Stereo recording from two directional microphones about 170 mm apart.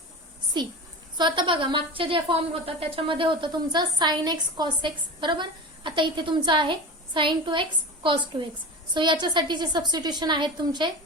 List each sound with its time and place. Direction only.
0.6 s a woman's voice: 25° right (ahead or behind)